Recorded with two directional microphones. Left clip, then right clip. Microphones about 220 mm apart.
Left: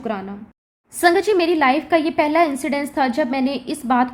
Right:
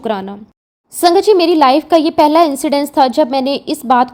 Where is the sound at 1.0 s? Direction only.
25° right (ahead or behind).